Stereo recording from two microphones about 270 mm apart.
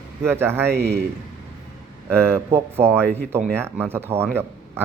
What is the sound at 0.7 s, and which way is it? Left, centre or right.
Speech, right.